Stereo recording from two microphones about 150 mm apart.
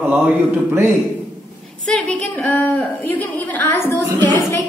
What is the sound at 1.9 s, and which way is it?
A woman's voice, 5° left (ahead or behind).